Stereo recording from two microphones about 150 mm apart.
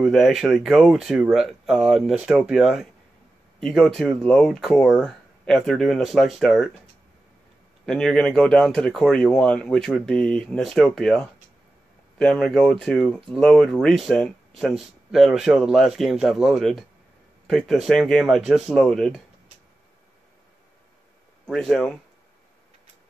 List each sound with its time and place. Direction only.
0.0 s speech: centre (ahead or behind)
7.8 s speech: 5° left (ahead or behind)
21.5 s speech: centre (ahead or behind)